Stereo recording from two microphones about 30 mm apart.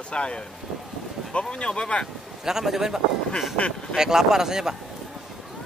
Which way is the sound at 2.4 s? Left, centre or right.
Centre.